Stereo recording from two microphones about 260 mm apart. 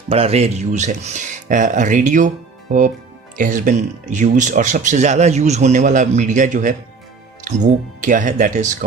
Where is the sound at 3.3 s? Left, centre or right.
Right.